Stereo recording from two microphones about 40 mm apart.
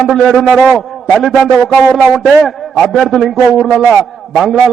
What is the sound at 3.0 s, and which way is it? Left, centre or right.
Speech, centre.